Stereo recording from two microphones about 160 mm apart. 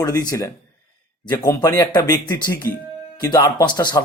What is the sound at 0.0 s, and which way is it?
Speech, 25° left (ahead or behind).